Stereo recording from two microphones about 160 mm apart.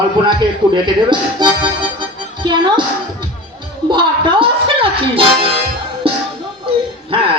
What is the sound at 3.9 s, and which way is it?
Speech, 30° right (ahead or behind).